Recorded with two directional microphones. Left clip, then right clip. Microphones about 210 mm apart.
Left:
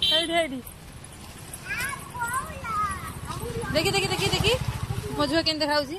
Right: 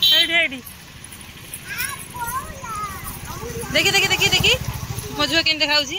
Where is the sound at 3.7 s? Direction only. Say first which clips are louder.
Right 8 dB; centre (ahead or behind).